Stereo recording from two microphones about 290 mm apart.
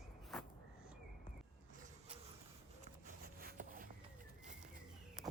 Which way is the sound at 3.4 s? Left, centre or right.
Right.